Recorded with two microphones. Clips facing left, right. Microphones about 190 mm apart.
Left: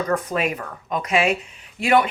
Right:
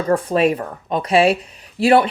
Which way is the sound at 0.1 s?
30° right (ahead or behind).